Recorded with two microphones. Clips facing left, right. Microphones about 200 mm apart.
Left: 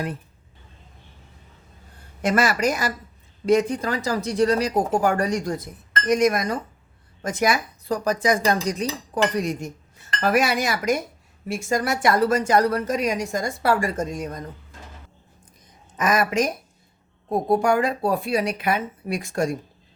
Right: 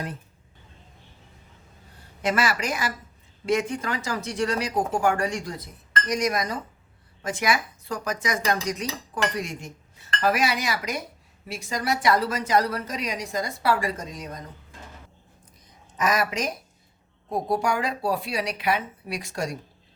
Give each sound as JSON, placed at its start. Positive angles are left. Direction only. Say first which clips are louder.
{"t": 2.2, "sound": "a woman's voice", "louder": "left 5 dB", "side_deg": 45}
{"t": 7.2, "sound": "a woman's voice", "louder": "left 3 dB", "side_deg": 40}
{"t": 16.0, "sound": "a woman's voice", "louder": "left 4 dB", "side_deg": 50}